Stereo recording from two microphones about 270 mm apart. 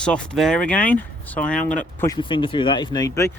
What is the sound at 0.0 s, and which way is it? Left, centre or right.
Speech, centre.